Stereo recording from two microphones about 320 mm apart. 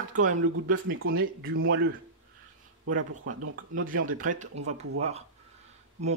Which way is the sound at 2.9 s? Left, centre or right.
Right.